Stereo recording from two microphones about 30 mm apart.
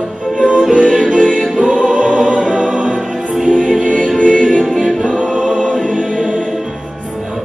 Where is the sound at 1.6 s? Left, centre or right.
Centre.